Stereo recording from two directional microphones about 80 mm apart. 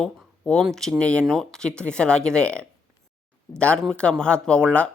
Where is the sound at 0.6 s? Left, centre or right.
Centre.